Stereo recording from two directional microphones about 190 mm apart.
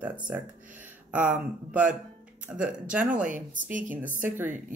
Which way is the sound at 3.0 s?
45° right (ahead or behind).